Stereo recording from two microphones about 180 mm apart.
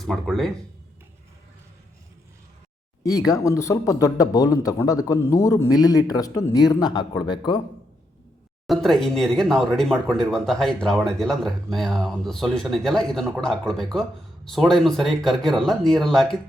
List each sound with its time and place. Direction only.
0.0 s speech: centre (ahead or behind)
3.0 s speech: 20° left (ahead or behind)
8.6 s speech: centre (ahead or behind)